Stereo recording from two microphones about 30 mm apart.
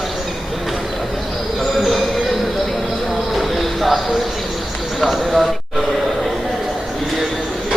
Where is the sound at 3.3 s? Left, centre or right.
Centre.